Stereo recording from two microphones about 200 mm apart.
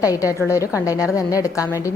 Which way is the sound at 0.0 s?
15° left (ahead or behind).